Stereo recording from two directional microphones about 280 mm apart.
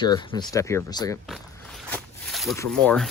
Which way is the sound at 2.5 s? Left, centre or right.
Centre.